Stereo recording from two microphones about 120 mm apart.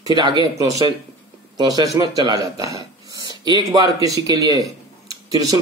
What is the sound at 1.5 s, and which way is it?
Speech, 35° right (ahead or behind).